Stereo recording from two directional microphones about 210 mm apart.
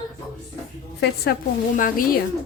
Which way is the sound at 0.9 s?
45° left (ahead or behind).